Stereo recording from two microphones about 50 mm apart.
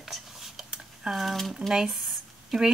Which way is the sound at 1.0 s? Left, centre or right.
Centre.